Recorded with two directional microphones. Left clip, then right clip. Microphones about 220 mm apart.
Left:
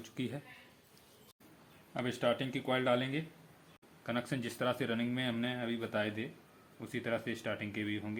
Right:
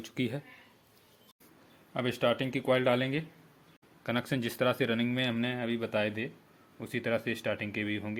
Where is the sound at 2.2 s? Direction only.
45° right (ahead or behind).